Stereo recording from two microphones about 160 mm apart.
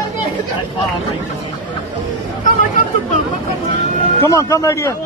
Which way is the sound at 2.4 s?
50° left (ahead or behind).